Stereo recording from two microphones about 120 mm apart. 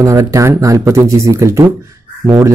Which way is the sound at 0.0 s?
25° right (ahead or behind).